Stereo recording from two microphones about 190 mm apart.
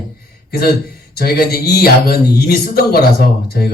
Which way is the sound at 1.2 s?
55° left (ahead or behind).